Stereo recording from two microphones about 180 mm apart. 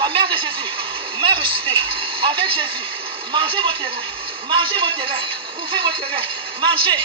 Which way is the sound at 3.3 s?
30° right (ahead or behind).